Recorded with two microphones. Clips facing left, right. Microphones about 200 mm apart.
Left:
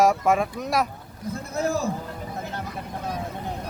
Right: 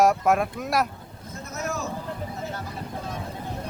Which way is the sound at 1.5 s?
30° left (ahead or behind).